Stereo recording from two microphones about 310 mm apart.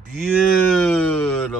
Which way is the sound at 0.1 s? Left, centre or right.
Centre.